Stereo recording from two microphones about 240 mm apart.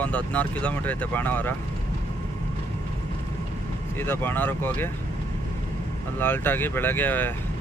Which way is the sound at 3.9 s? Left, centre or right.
Centre.